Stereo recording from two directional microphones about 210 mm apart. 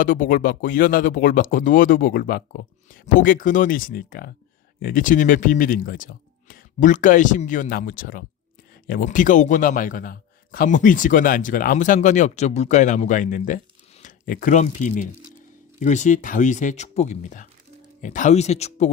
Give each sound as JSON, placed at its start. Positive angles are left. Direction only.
{"t": 0.0, "sound": "speech", "side_deg": 40}